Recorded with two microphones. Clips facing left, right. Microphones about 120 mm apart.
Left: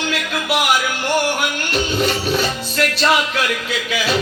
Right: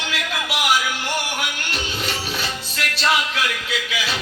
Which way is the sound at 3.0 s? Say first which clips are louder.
Left 2 dB; 50° left (ahead or behind).